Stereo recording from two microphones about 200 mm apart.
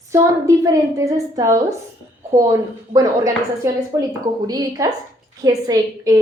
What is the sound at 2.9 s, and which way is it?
A woman's voice, 15° right (ahead or behind).